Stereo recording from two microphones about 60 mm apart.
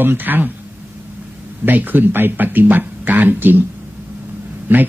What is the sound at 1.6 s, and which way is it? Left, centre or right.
A man's voice, right.